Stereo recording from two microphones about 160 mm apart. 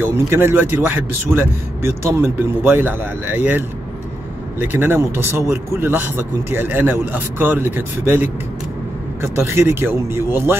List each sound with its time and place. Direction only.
0.0 s a man's voice: 15° right (ahead or behind)